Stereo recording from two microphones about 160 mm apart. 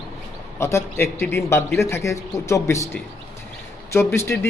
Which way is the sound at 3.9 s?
15° left (ahead or behind).